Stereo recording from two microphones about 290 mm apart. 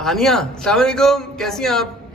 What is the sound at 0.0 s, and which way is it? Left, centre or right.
A man's voice, centre.